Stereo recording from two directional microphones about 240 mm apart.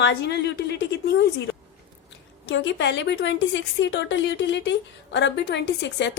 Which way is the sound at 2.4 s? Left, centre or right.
Left.